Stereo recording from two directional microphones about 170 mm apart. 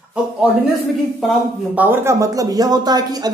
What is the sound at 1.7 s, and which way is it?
A woman's voice, 10° right (ahead or behind).